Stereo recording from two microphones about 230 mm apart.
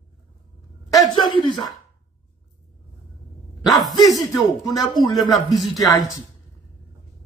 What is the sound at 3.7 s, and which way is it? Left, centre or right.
Speech, centre.